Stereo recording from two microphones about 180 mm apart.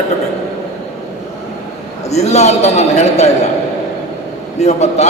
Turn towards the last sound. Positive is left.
turn(degrees=35)  # may be behind; listen again after turning